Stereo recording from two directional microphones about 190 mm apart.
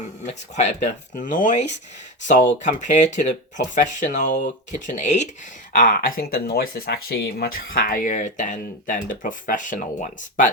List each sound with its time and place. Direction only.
0.3 s speech: 35° left (ahead or behind)